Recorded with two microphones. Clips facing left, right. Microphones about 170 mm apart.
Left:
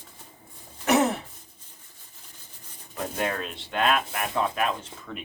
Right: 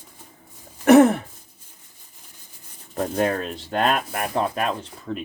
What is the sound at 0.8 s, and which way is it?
Speech, 55° right (ahead or behind).